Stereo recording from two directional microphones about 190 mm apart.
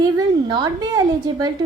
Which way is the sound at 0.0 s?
20° right (ahead or behind).